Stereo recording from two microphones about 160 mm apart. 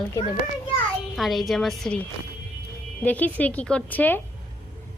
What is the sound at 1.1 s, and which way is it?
A woman's voice, centre (ahead or behind).